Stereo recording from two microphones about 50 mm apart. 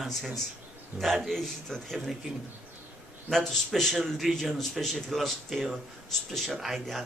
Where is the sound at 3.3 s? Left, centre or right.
Centre.